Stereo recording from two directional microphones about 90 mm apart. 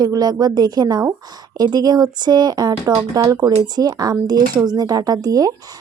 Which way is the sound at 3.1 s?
35° right (ahead or behind).